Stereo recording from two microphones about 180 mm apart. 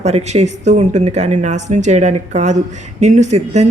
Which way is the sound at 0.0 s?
40° right (ahead or behind).